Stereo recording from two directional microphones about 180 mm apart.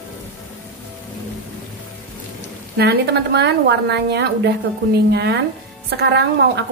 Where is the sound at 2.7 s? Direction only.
70° right (ahead or behind).